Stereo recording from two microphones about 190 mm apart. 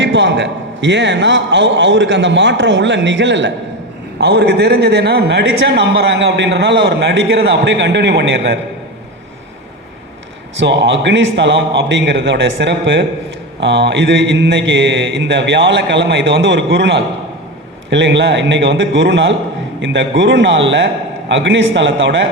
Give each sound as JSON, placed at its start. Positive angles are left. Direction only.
{"t": 0.0, "sound": "a man's voice", "side_deg": -70}
{"t": 4.2, "sound": "a man's voice", "side_deg": -60}
{"t": 10.6, "sound": "a man's voice", "side_deg": -65}